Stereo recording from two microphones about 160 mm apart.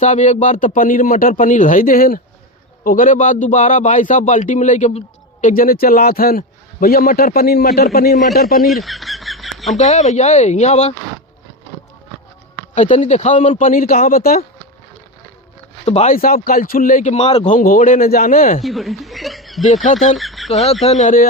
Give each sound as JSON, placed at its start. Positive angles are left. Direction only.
{"t": 0.0, "sound": "a man's voice", "side_deg": 50}
{"t": 8.3, "sound": "a man's voice", "side_deg": 65}
{"t": 8.6, "sound": "bird", "side_deg": 0}
{"t": 9.7, "sound": "speech", "side_deg": 45}
{"t": 12.7, "sound": "speech", "side_deg": 50}
{"t": 13.6, "sound": "a man's voice", "side_deg": 55}
{"t": 15.9, "sound": "speech", "side_deg": 40}
{"t": 16.1, "sound": "a man's voice", "side_deg": 65}
{"t": 18.6, "sound": "speech", "side_deg": 0}
{"t": 19.6, "sound": "speech", "side_deg": 50}
{"t": 20.1, "sound": "a sound", "side_deg": 0}
{"t": 20.8, "sound": "speech", "side_deg": 50}